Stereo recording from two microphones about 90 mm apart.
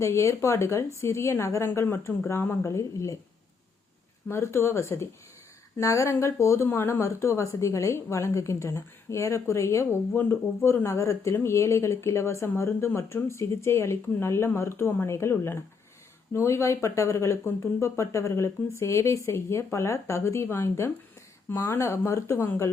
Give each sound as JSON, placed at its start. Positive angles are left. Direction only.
{"t": 0.0, "sound": "speech", "side_deg": 30}
{"t": 4.3, "sound": "speech", "side_deg": 30}